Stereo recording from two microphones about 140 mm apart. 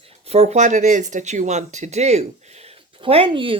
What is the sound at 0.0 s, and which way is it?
Speech, 45° right (ahead or behind).